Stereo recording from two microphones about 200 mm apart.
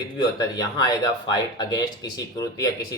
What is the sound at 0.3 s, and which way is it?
Speech, 20° left (ahead or behind).